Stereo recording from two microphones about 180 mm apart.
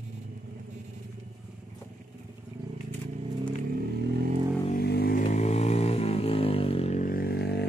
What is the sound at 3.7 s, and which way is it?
Vehicle, 65° right (ahead or behind).